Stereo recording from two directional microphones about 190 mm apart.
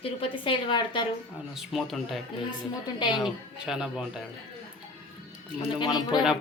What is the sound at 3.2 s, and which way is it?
Speech, 5° right (ahead or behind).